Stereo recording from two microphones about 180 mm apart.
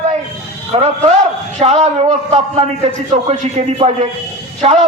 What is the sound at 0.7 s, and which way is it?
A man's voice, 40° right (ahead or behind).